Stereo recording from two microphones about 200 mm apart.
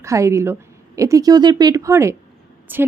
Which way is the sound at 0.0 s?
15° right (ahead or behind).